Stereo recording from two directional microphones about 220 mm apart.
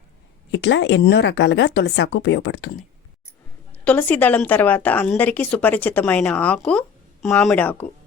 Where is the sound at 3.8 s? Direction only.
5° left (ahead or behind).